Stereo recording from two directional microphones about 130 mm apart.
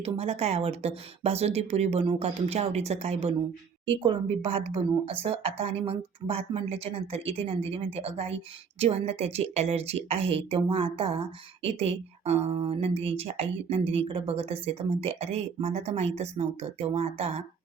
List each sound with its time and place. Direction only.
0.0 s a woman's voice: 50° right (ahead or behind)